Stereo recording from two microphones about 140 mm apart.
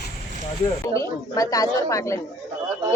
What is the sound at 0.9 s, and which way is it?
Speech, 25° left (ahead or behind).